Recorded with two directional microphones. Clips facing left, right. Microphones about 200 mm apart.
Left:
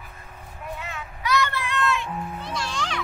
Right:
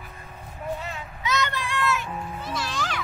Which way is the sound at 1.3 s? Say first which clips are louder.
Left 2 dB; 20° right (ahead or behind).